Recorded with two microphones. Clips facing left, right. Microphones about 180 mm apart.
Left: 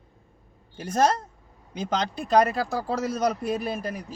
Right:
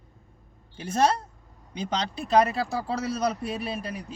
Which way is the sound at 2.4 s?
45° left (ahead or behind).